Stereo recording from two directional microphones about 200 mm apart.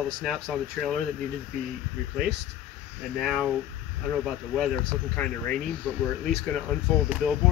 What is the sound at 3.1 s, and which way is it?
Speech, centre (ahead or behind).